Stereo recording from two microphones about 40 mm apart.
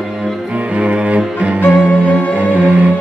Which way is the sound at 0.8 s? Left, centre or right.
Right.